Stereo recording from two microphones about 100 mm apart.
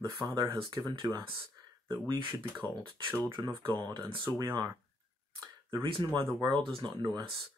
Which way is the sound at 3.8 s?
40° right (ahead or behind).